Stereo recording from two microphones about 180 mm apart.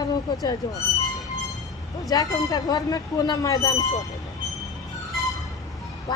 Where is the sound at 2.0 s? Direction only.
20° left (ahead or behind).